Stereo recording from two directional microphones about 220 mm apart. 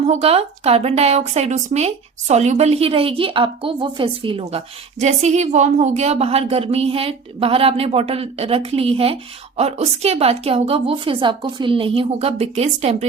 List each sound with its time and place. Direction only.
0.0 s a woman's voice: 30° right (ahead or behind)